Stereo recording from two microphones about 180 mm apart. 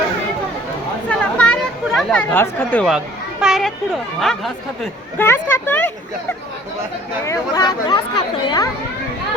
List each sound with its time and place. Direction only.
1.0 s chatter: 5° left (ahead or behind)
3.4 s a sound: centre (ahead or behind)
4.2 s speech: centre (ahead or behind)
5.2 s speech: 15° left (ahead or behind)
7.3 s speech: 20° left (ahead or behind)